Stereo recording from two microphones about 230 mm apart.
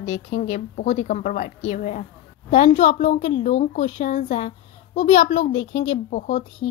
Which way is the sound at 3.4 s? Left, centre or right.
Left.